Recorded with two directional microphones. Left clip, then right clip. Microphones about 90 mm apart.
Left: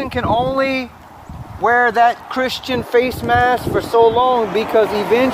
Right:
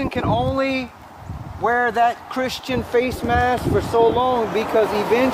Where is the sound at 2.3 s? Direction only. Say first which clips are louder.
Left 4 dB; 20° left (ahead or behind).